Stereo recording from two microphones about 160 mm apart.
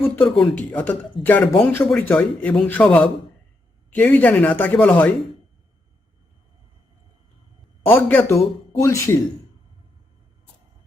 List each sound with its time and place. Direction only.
0.0 s speech: 10° left (ahead or behind)
7.9 s speech: 15° left (ahead or behind)